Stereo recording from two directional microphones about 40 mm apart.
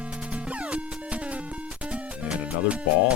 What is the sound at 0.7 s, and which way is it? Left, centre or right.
Music, right.